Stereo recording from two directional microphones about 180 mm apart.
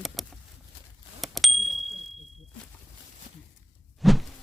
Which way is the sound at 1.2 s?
Centre (ahead or behind).